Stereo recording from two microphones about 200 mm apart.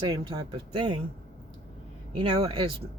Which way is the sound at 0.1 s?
25° right (ahead or behind).